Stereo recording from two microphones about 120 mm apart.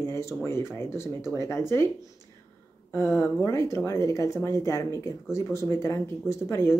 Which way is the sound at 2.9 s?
25° left (ahead or behind).